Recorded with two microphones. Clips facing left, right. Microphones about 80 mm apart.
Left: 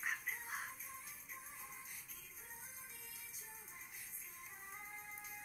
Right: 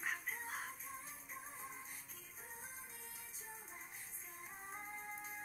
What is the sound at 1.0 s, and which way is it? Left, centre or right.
Music, right.